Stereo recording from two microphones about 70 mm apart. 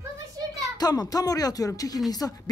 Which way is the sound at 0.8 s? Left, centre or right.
Left.